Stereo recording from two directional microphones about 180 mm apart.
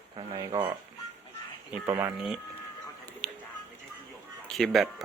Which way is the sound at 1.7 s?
15° right (ahead or behind).